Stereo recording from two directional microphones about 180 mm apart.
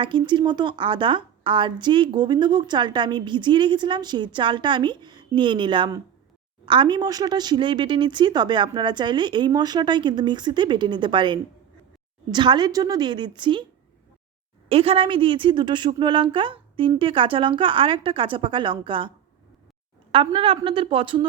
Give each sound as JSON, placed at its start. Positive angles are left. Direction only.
{"t": 0.0, "sound": "a woman's voice", "side_deg": -25}
{"t": 14.7, "sound": "a woman's voice", "side_deg": -30}